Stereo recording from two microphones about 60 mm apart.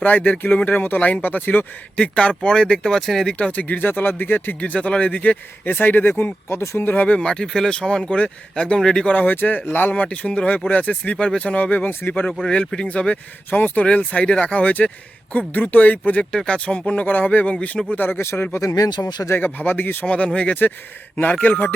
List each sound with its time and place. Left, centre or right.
0.0 s speech: left
2.0 s speech: centre
3.3 s speech: left
6.9 s speech: left
7.2 s speech: centre
9.1 s speech: left
12.5 s speech: centre
16.3 s speech: centre
17.9 s speech: left
18.6 s speech: left
19.5 s speech: left
20.1 s speech: left